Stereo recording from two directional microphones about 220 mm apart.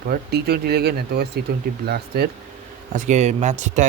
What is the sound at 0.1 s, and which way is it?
Speech, 45° right (ahead or behind).